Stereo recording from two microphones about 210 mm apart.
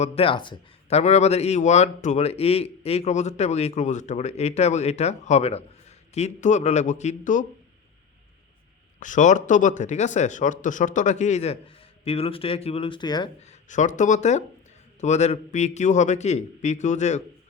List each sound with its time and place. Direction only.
0.0 s speech: 25° left (ahead or behind)
9.0 s speech: 35° left (ahead or behind); by 13.3 s 20° left (ahead or behind)
13.4 s speech: 35° left (ahead or behind)